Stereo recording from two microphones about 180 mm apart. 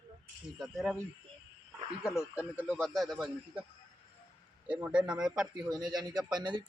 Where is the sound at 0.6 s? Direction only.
Centre (ahead or behind).